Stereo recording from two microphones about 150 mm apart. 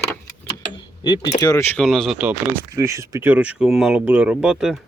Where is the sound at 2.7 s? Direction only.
20° right (ahead or behind); by 4.8 s 5° right (ahead or behind).